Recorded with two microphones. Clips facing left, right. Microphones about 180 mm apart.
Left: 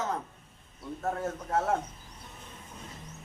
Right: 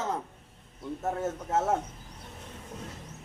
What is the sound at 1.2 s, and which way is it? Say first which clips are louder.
Speech: right 2 dB; 25° right (ahead or behind).